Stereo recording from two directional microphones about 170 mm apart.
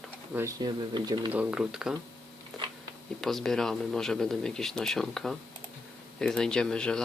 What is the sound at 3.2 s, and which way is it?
Speech, centre (ahead or behind).